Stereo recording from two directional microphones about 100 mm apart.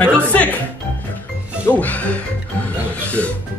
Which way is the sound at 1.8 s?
15° left (ahead or behind).